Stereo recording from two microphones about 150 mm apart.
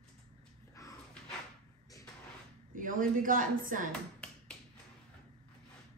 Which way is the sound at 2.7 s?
65° right (ahead or behind).